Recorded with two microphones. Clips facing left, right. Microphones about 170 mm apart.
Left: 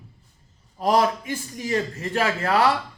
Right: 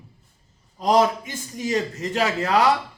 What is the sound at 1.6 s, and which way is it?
A man's voice, 20° right (ahead or behind).